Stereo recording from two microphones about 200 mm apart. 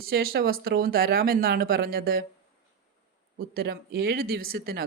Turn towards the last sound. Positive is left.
turn(degrees=-50)  # may be behind; listen again after turning